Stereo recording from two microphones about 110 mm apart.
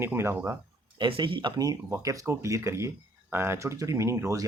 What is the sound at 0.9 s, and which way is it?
Speech, 50° right (ahead or behind).